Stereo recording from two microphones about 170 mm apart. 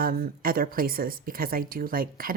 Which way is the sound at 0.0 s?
60° right (ahead or behind).